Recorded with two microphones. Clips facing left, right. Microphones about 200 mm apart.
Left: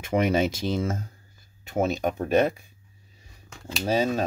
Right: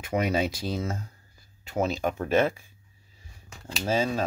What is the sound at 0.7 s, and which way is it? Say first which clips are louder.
Speech: left 4 dB; 50° left (ahead or behind).